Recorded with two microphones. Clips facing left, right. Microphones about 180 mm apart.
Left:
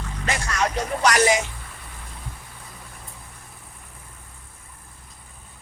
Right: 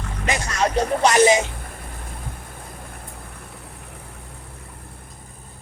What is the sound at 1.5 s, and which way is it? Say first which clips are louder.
Vehicle: right 6 dB; 50° right (ahead or behind).